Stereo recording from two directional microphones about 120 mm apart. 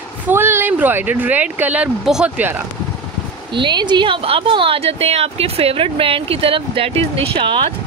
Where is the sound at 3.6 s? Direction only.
40° right (ahead or behind).